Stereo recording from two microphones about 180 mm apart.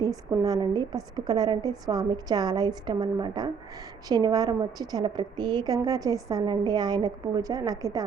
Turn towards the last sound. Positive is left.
turn(degrees=-20)  # may be behind; listen again after turning